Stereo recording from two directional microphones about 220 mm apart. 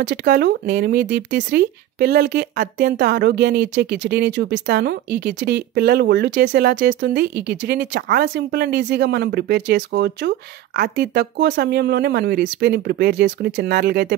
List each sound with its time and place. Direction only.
0.0 s speech: 50° right (ahead or behind)